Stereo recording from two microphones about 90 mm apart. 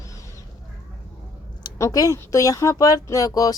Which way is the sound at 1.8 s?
40° left (ahead or behind).